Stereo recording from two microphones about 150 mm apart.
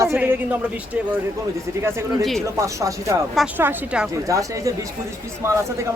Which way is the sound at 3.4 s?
10° right (ahead or behind).